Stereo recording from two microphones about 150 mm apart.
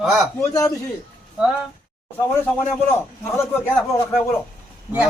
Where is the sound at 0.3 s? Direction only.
20° left (ahead or behind).